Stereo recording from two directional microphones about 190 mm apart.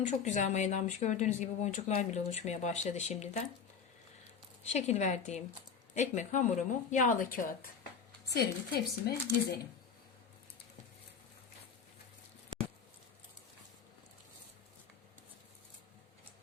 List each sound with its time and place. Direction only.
0.1 s speech: 40° left (ahead or behind)
4.6 s a woman's voice: 35° left (ahead or behind); by 9.1 s 55° left (ahead or behind)